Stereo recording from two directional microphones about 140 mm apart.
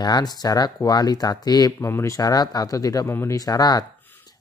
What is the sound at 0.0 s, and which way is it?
Speech, 30° left (ahead or behind).